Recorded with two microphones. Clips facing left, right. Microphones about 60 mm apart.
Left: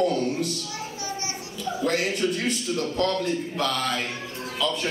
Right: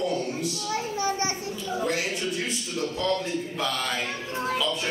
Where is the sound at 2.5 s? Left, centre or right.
Left.